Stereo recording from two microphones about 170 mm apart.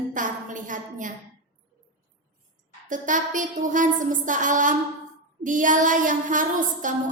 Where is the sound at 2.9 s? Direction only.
50° right (ahead or behind).